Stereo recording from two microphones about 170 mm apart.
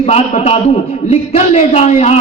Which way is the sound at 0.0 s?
40° left (ahead or behind).